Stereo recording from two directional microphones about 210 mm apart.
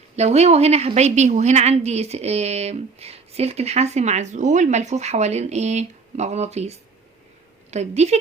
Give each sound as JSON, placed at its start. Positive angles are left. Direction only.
{"t": 0.2, "sound": "a woman's voice", "side_deg": -30}